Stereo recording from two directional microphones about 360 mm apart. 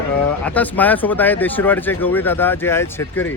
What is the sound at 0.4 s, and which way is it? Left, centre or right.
Speech, centre.